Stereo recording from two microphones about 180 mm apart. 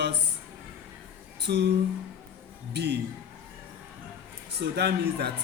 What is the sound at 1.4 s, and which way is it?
Speech, 70° right (ahead or behind).